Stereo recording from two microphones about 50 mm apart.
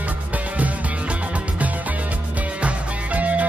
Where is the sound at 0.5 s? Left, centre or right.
Right.